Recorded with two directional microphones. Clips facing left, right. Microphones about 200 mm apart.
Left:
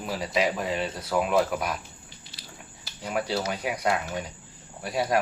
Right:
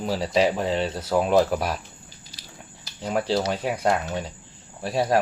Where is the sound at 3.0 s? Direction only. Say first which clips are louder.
Right 4 dB; 30° right (ahead or behind).